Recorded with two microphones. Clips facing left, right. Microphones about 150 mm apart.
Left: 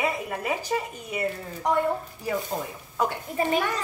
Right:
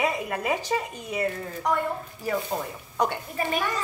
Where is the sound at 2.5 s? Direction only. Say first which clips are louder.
Right 1 dB; 10° right (ahead or behind).